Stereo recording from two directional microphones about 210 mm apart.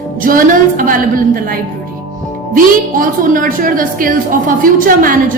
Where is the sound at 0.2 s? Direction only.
40° right (ahead or behind).